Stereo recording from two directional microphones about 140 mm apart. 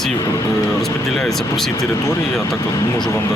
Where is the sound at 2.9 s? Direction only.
30° left (ahead or behind).